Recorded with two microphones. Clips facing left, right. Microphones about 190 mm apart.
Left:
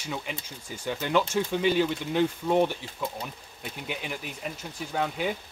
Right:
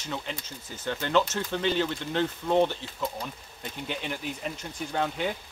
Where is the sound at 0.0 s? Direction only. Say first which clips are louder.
Even; 10° left (ahead or behind).